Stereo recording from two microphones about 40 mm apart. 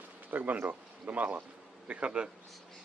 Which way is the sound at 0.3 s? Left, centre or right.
Right.